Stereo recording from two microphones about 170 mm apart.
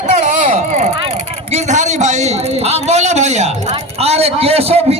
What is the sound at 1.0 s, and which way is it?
A man's voice, 35° right (ahead or behind).